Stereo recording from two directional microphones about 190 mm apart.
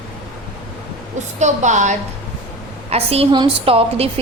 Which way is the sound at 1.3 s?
40° right (ahead or behind).